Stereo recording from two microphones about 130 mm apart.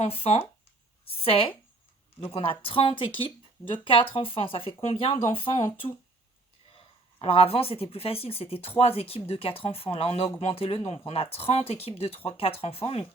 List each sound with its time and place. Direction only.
0.0 s speech: 55° left (ahead or behind)
6.7 s speech: 50° left (ahead or behind)